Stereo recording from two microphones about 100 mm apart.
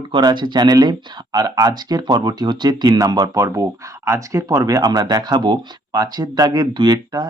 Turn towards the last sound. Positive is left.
turn(degrees=-40)  # may be behind; listen again after turning